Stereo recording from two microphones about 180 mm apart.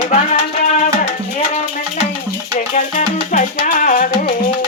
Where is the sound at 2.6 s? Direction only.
45° left (ahead or behind).